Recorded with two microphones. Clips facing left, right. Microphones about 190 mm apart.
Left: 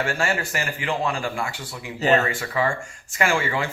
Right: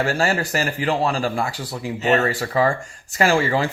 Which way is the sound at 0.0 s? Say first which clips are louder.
Right 4 dB; 35° right (ahead or behind).